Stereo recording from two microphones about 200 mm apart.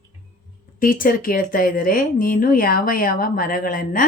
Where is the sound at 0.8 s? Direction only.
45° left (ahead or behind).